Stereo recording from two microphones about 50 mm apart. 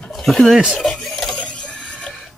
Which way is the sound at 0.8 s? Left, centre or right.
Centre.